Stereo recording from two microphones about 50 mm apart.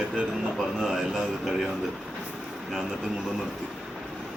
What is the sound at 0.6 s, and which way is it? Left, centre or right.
A man's voice, centre.